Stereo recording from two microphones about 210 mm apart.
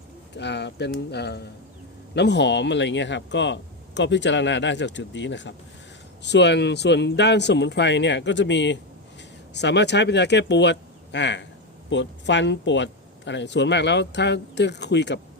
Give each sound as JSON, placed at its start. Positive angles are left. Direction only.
{"t": 0.3, "sound": "speech", "side_deg": 55}